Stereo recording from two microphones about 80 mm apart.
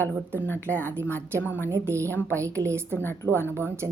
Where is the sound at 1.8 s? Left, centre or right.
Right.